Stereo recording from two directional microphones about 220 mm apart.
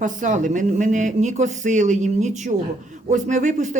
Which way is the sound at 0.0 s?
35° right (ahead or behind).